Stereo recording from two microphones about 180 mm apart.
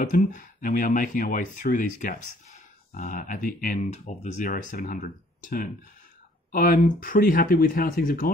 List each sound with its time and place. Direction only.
0.0 s speech: 50° left (ahead or behind)